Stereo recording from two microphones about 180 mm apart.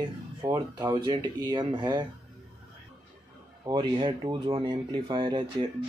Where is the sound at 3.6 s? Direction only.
25° right (ahead or behind).